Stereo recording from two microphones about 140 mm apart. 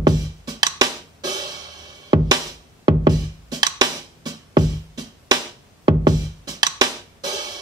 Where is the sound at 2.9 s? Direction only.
30° right (ahead or behind).